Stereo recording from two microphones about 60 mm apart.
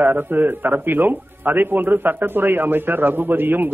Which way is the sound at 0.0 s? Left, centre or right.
Right.